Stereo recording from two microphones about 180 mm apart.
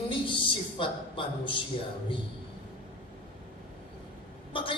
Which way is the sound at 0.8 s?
30° left (ahead or behind).